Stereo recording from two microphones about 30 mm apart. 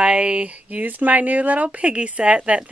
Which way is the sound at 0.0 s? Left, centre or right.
Right.